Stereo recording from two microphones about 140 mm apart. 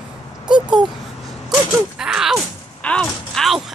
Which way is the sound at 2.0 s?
5° right (ahead or behind).